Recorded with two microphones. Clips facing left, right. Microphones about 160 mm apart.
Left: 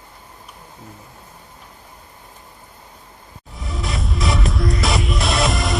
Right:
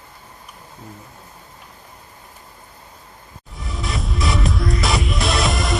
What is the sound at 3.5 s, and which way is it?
Music, centre (ahead or behind).